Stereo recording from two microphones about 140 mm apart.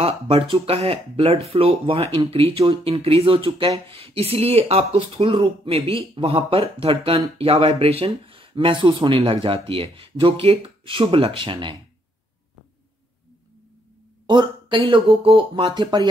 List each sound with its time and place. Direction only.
0.0 s speech: 45° right (ahead or behind)
14.2 s speech: 30° right (ahead or behind)